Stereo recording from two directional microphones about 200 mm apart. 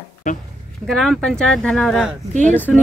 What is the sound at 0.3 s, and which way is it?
Speech, 40° left (ahead or behind).